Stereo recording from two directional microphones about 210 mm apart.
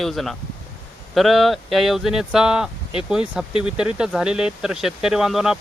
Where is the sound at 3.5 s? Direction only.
25° left (ahead or behind).